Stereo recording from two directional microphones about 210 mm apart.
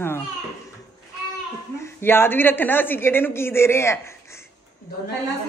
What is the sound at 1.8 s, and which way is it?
Speech, 10° left (ahead or behind).